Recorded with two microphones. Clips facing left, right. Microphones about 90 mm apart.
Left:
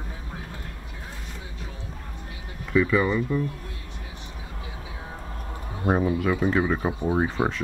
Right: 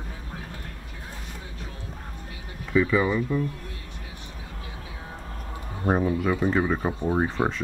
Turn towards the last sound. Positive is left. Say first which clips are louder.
# even
turn(degrees=5)  # may be behind; listen again after turning